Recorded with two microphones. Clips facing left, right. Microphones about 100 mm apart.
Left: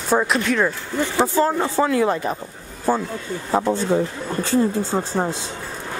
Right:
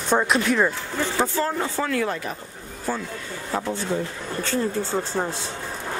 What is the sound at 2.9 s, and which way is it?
Speech, 40° left (ahead or behind).